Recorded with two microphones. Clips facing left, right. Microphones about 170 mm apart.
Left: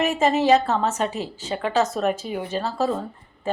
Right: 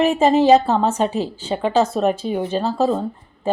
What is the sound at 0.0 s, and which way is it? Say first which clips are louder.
A woman's voice: right 5 dB; 30° right (ahead or behind).